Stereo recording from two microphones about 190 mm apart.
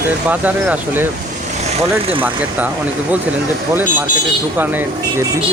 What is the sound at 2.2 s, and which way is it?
Speech, 10° right (ahead or behind).